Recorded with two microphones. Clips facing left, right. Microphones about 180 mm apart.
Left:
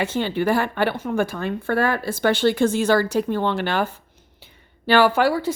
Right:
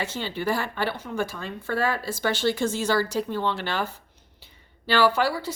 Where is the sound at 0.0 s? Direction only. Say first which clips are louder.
Left 7 dB; 55° left (ahead or behind).